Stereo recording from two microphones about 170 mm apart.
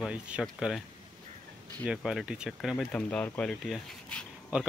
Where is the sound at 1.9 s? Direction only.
Centre (ahead or behind).